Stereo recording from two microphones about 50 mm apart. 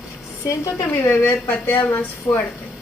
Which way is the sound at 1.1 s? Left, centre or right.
Left.